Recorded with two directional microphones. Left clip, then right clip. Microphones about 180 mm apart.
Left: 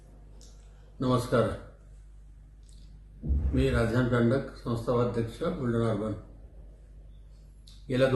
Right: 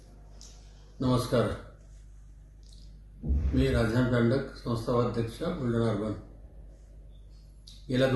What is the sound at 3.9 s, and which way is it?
Speech, 10° left (ahead or behind).